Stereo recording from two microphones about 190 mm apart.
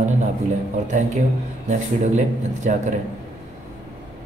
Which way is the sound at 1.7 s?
40° right (ahead or behind).